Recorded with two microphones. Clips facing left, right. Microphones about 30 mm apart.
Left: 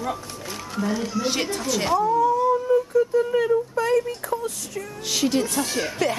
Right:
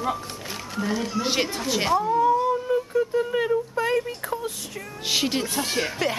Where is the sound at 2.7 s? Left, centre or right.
Right.